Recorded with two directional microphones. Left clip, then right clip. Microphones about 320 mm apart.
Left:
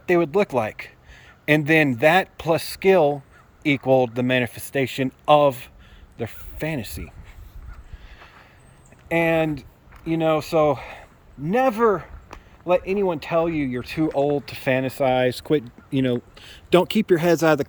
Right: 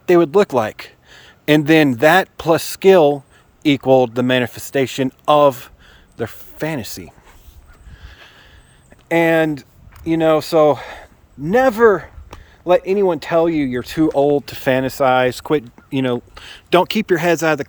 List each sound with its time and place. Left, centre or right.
0.0 s speech: centre
8.0 s a sound: centre
9.0 s speech: centre